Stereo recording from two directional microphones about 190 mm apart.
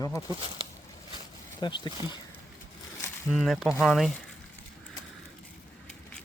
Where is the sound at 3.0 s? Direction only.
Centre (ahead or behind).